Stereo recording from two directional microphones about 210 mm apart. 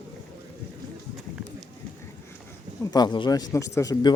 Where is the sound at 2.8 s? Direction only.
20° left (ahead or behind).